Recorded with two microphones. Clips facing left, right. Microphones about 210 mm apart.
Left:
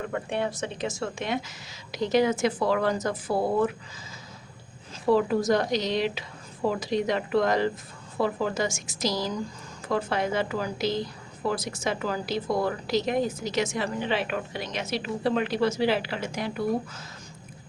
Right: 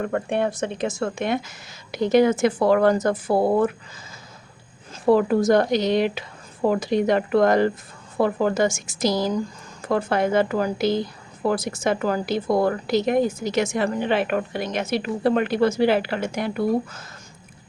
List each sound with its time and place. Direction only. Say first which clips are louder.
0.0 s a woman's voice: right 6 dB; 55° right (ahead or behind)
5.0 s a woman's voice: right 5 dB; 55° right (ahead or behind)